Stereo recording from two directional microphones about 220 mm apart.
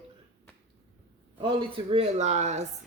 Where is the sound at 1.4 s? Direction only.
20° right (ahead or behind).